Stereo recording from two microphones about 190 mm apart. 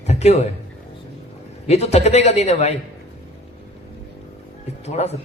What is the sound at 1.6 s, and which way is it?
A man's voice, 35° left (ahead or behind).